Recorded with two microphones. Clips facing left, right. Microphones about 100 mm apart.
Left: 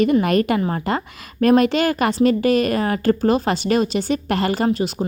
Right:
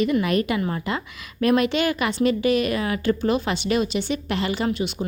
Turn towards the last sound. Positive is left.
turn(degrees=40)  # may be behind; listen again after turning